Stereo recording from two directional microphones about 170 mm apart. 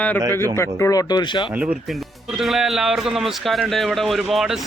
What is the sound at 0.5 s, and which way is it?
Speech, 15° left (ahead or behind).